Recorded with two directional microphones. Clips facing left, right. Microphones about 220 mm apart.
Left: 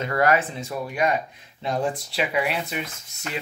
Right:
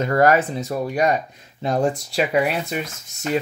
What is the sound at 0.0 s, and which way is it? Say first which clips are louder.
Speech: right 5 dB; 40° right (ahead or behind).